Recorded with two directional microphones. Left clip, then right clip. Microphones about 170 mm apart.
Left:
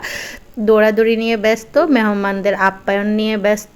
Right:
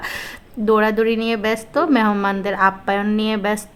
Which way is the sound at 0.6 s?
15° left (ahead or behind).